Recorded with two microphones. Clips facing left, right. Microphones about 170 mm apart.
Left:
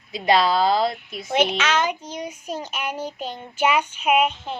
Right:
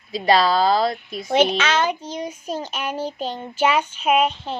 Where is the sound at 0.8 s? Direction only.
40° right (ahead or behind).